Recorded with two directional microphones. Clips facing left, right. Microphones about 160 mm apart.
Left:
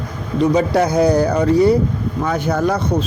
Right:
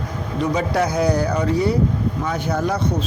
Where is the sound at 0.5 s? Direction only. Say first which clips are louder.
Left 4 dB; 30° left (ahead or behind).